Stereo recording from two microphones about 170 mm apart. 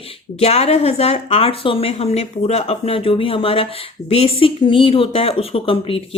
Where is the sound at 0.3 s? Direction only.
35° left (ahead or behind).